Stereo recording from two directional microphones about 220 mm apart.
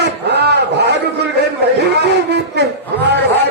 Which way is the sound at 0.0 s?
50° right (ahead or behind).